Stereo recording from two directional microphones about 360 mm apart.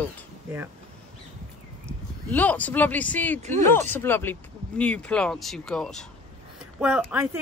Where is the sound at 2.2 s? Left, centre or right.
Centre.